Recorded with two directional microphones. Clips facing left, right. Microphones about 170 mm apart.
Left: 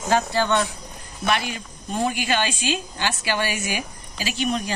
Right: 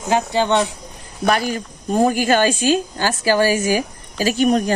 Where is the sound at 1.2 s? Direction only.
40° right (ahead or behind).